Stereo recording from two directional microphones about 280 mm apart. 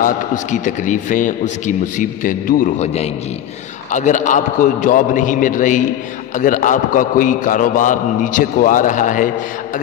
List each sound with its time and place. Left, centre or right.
0.0 s a man's voice: left